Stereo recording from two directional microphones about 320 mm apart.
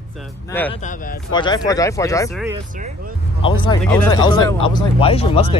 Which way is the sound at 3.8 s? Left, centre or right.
Centre.